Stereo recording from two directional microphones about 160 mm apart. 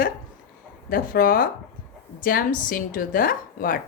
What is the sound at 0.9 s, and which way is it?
Speech, 65° left (ahead or behind).